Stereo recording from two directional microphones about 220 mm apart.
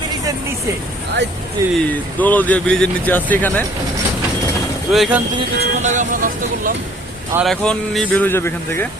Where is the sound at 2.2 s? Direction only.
10° left (ahead or behind).